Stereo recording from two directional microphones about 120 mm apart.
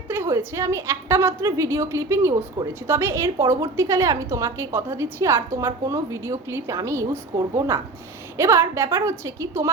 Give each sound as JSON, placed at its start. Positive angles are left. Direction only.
{"t": 0.1, "sound": "a woman's voice", "side_deg": -25}